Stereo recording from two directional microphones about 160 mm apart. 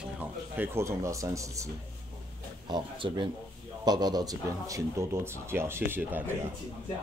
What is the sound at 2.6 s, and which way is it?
Speech, 30° right (ahead or behind).